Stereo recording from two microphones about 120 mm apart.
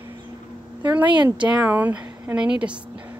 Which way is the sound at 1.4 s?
10° right (ahead or behind).